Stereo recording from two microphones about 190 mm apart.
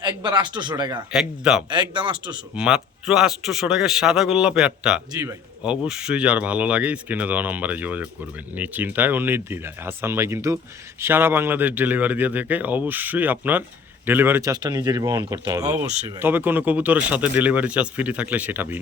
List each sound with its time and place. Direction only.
0.0 s speech: 20° right (ahead or behind)
1.1 s a man's voice: 5° right (ahead or behind)
1.7 s speech: 25° right (ahead or behind)
2.6 s a man's voice: 5° right (ahead or behind)